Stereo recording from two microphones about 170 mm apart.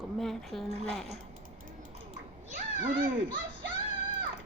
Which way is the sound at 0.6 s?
40° right (ahead or behind).